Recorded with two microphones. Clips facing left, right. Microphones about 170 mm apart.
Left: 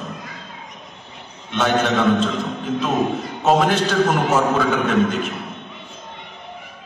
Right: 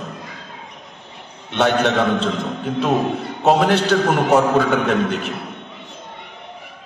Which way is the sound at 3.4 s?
65° right (ahead or behind).